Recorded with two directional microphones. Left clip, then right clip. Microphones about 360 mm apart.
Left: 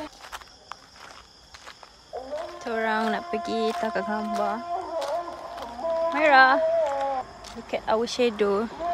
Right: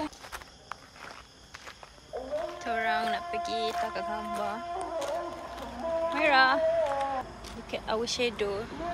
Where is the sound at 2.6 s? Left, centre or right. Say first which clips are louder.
Left 4 dB; centre.